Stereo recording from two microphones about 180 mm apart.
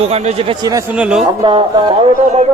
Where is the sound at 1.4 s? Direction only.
25° right (ahead or behind).